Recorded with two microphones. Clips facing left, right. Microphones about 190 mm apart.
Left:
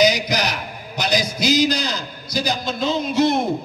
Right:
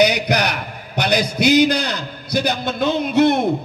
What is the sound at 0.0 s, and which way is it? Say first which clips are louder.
A man's voice: right 2 dB; 60° right (ahead or behind).